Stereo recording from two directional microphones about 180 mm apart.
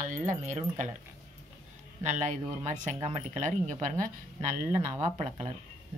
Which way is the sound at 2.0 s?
45° right (ahead or behind).